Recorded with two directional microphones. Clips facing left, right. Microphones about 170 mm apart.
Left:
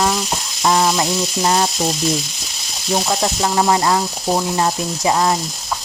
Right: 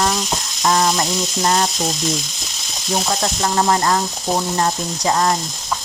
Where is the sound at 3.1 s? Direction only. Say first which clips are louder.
Left 1 dB; 10° left (ahead or behind).